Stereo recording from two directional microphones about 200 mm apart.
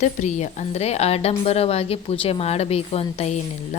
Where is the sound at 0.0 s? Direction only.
35° left (ahead or behind).